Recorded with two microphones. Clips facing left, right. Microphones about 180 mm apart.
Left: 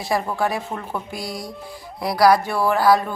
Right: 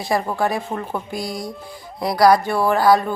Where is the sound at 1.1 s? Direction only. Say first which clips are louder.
Right 3 dB; centre (ahead or behind).